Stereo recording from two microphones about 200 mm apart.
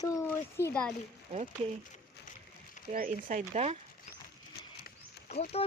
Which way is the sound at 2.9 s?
40° right (ahead or behind).